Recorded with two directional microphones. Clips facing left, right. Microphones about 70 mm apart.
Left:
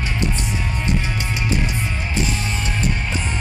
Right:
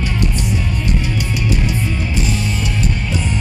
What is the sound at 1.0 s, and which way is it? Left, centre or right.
Music, left.